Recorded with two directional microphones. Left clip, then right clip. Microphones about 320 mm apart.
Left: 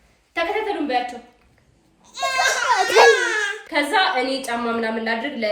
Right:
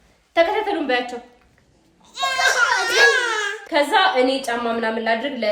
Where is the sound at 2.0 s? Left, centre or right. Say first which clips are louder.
Right 1 dB; centre.